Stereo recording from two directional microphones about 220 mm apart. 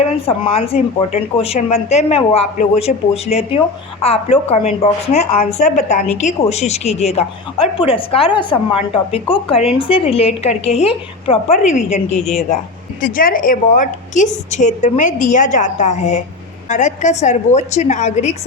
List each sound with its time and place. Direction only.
0.0 s a woman's voice: 25° left (ahead or behind)